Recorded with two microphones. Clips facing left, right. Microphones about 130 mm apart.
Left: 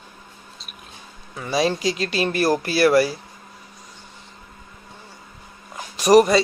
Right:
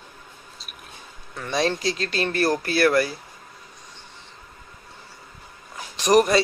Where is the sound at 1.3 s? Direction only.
5° left (ahead or behind).